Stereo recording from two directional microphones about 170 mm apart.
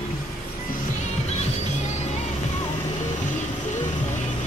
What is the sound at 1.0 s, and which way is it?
Music, 40° left (ahead or behind).